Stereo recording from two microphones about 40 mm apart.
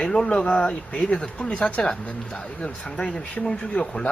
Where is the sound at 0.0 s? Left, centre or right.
Left.